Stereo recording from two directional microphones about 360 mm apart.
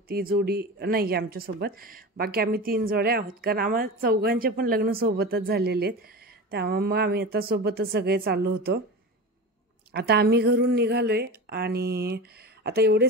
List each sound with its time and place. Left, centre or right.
0.1 s speech: right
9.9 s speech: right